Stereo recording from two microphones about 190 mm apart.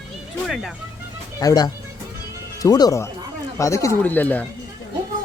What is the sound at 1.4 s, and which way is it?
Speech, 20° left (ahead or behind).